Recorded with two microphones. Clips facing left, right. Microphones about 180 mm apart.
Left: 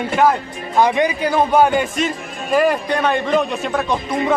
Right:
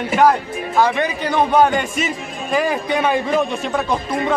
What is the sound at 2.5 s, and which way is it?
Speech, 5° right (ahead or behind).